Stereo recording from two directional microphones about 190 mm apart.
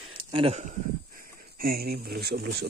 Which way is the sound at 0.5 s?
45° right (ahead or behind).